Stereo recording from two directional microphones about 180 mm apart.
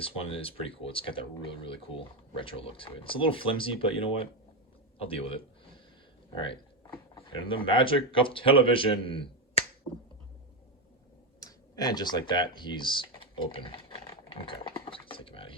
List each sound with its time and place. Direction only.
0.0 s a man's voice: 30° left (ahead or behind)
7.3 s speech: 30° left (ahead or behind)
11.3 s computer keyboard: 20° left (ahead or behind)